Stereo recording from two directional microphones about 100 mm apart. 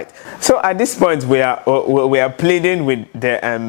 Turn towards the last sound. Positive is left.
turn(degrees=15)  # may be behind; listen again after turning